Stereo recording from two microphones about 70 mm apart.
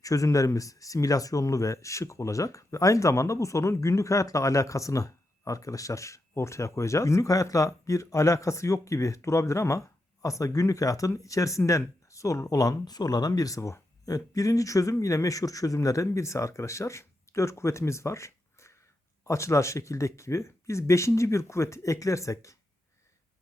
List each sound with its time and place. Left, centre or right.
0.0 s speech: left